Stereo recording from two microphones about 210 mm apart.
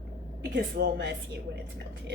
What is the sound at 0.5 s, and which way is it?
Speech, 55° right (ahead or behind).